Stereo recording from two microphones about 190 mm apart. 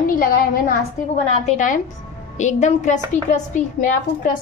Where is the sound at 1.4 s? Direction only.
40° left (ahead or behind).